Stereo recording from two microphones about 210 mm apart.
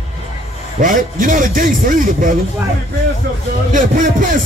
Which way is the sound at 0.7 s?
40° right (ahead or behind).